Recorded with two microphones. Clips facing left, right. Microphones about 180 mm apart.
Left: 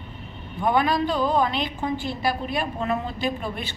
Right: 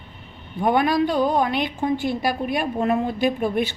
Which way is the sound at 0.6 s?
50° right (ahead or behind).